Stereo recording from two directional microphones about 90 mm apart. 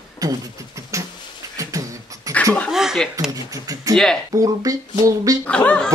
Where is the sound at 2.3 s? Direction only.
40° right (ahead or behind).